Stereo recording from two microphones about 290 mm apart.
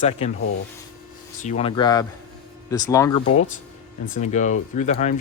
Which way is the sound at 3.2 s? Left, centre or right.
Left.